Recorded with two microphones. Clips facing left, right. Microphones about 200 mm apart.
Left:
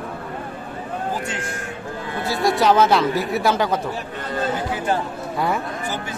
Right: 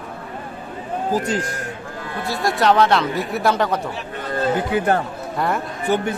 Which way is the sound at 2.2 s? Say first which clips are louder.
Left 1 dB; centre (ahead or behind).